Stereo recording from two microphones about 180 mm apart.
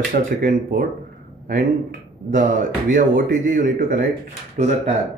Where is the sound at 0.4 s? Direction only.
50° right (ahead or behind).